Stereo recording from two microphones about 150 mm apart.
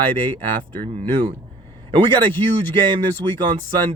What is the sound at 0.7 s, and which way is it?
Speech, 35° right (ahead or behind).